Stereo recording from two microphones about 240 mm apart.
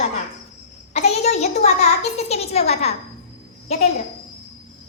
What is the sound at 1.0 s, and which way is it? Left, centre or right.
A woman's voice, left.